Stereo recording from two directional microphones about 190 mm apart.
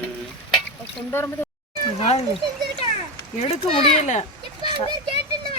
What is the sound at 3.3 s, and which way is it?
Speech, 30° left (ahead or behind).